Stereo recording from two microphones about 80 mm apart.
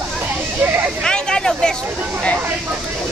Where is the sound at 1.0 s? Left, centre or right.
Centre.